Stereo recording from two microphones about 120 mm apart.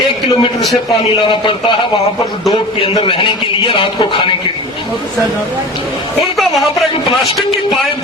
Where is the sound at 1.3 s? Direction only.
40° left (ahead or behind).